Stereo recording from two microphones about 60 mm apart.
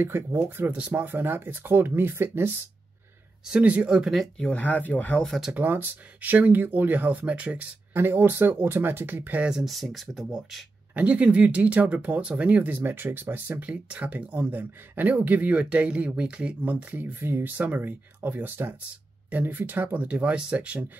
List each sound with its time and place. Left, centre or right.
0.0 s speech: right
0.7 s speech: right
1.0 s speech: right
3.4 s speech: centre
4.4 s speech: left
5.5 s speech: right
7.9 s speech: right
9.6 s speech: centre
11.0 s speech: right
17.6 s speech: right